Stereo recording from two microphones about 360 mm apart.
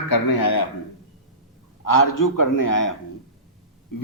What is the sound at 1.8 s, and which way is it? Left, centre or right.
A man's voice, left.